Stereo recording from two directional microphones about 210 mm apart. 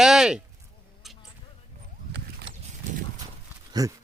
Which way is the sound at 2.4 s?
35° right (ahead or behind).